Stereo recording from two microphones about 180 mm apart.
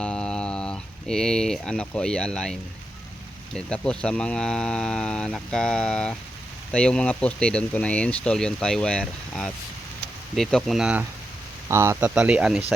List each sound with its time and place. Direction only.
0.0 s speech: 5° left (ahead or behind)
11.7 s speech: 15° right (ahead or behind)